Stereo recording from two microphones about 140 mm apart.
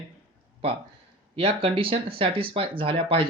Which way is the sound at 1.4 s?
40° right (ahead or behind).